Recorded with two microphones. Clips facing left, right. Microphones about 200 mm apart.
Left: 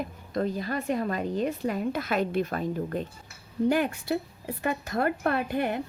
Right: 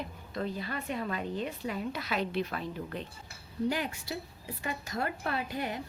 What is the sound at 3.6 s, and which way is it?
Speech, 55° left (ahead or behind).